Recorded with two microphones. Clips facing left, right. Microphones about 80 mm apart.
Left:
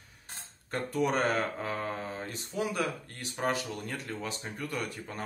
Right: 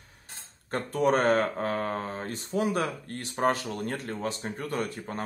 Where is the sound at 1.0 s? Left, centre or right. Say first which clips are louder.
Right 6 dB; right.